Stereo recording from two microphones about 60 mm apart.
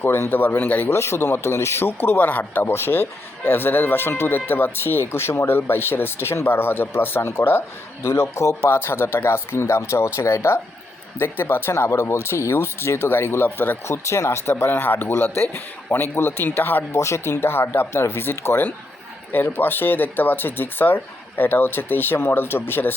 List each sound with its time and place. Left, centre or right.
0.0 s speech: left
0.9 s speech: left
13.8 s speech: left
16.9 s speech: left